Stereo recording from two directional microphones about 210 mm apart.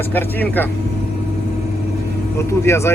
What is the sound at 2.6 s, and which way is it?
Speech, 15° left (ahead or behind).